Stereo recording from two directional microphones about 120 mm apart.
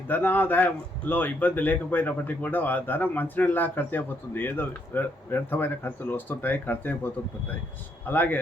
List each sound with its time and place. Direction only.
0.1 s speech: 15° left (ahead or behind)